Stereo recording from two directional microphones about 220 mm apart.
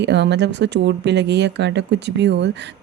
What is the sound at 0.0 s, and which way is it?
Speech, 50° right (ahead or behind).